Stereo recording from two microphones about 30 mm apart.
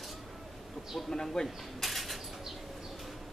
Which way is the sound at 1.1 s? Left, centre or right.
Centre.